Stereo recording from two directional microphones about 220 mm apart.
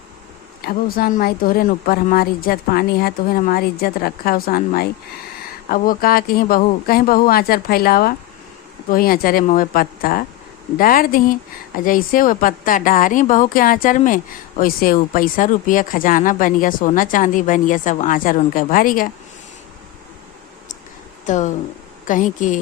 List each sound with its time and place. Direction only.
0.6 s speech: 40° left (ahead or behind)
21.2 s speech: 35° left (ahead or behind)